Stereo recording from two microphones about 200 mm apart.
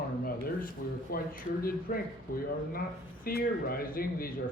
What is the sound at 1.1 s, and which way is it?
Speech, 45° left (ahead or behind).